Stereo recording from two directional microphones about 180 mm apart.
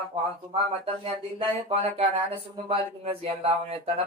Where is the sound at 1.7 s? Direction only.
35° right (ahead or behind).